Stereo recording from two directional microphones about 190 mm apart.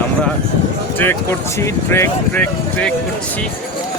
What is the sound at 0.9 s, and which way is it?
Speech, 10° left (ahead or behind).